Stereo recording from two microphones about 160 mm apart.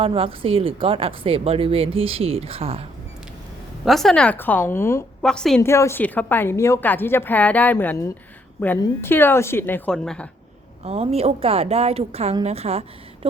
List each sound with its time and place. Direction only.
0.0 s speech: 35° right (ahead or behind)
3.8 s a woman's voice: centre (ahead or behind)
5.2 s a woman's voice: 5° left (ahead or behind)
5.6 s a woman's voice: 15° left (ahead or behind)
10.8 s speech: 40° right (ahead or behind)